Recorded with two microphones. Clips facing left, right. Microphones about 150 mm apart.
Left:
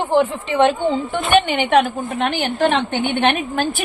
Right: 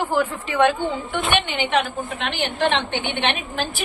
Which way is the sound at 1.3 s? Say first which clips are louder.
Left 8 dB; 50° left (ahead or behind).